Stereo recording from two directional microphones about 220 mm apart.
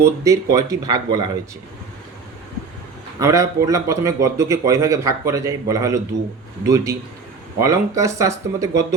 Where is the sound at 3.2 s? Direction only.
15° right (ahead or behind).